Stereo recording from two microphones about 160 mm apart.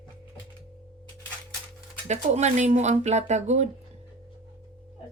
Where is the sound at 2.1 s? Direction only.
45° right (ahead or behind).